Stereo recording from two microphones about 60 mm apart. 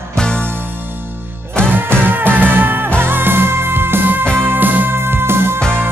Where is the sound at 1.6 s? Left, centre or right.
Right.